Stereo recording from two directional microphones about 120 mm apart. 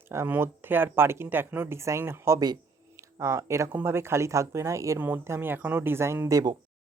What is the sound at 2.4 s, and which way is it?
Speech, 30° right (ahead or behind).